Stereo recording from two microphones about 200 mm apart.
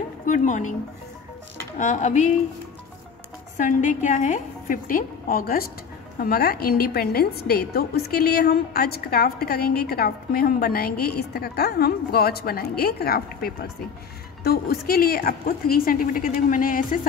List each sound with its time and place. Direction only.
0.3 s a woman's voice: 40° left (ahead or behind)
1.8 s a woman's voice: 40° left (ahead or behind)
3.5 s a woman's voice: 40° left (ahead or behind)